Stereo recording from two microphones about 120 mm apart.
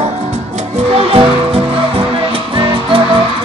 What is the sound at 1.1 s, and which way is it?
Music, 55° right (ahead or behind).